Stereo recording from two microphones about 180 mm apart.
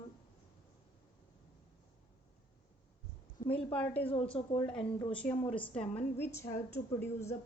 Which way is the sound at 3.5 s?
10° left (ahead or behind).